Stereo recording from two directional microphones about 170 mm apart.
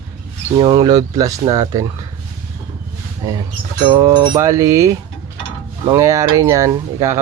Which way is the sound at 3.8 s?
25° right (ahead or behind).